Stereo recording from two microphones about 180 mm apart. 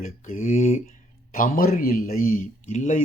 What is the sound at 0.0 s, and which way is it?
Speech, 45° left (ahead or behind).